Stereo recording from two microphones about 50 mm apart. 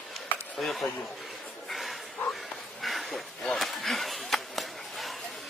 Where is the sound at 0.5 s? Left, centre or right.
Centre.